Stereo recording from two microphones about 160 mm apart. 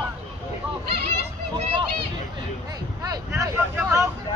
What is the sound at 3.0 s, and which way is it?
Vehicle, 20° right (ahead or behind).